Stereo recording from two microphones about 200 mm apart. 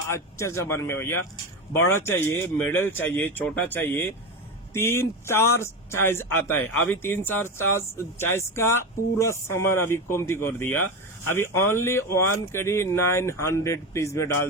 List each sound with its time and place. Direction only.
0.1 s speech: 15° left (ahead or behind)